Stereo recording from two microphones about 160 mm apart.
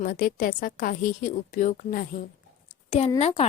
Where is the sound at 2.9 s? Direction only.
40° left (ahead or behind).